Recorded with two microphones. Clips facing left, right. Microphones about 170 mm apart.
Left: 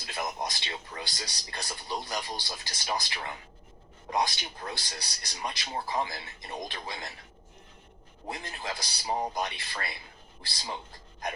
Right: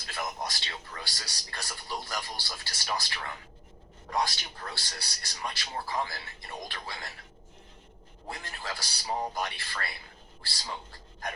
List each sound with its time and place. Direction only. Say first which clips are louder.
0.0 s a man's voice: left 2 dB; 20° left (ahead or behind)
8.3 s a man's voice: left 2 dB; 20° left (ahead or behind)